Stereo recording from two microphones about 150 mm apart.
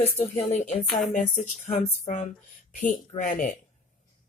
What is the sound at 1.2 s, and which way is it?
Speech, 50° left (ahead or behind).